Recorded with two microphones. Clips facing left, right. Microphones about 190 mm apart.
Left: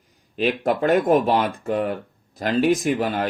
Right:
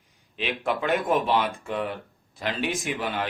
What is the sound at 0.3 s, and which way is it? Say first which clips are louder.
Speech: left 7 dB; 45° left (ahead or behind).